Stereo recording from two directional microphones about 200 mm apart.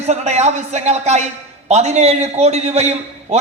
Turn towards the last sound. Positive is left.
turn(degrees=-35)  # may be behind; listen again after turning